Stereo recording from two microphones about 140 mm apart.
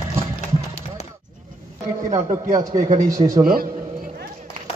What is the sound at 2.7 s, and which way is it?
Speech, 60° right (ahead or behind).